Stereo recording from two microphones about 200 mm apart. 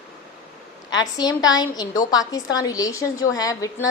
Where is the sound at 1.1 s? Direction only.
20° left (ahead or behind).